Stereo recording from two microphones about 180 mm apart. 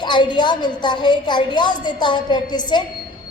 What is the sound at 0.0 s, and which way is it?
A woman's voice, 25° left (ahead or behind).